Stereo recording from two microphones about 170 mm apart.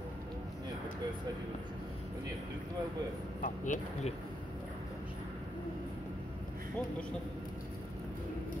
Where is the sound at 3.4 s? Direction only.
50° left (ahead or behind).